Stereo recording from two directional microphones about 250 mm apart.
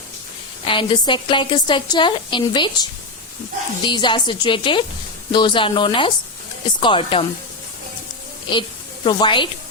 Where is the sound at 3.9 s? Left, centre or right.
Centre.